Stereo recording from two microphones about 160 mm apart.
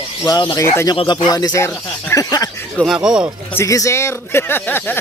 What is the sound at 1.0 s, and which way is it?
Speech, 30° left (ahead or behind).